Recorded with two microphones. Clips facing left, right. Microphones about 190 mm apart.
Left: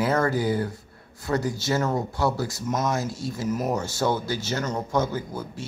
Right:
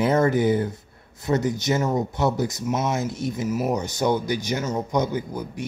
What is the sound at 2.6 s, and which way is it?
Speech, 10° right (ahead or behind).